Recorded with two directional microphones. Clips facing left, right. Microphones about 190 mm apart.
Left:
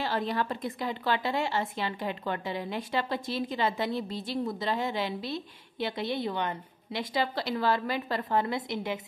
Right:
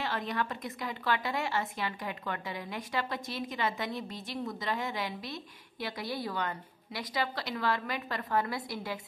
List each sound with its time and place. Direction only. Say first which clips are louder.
0.0 s a woman's voice: left 4 dB; 30° left (ahead or behind)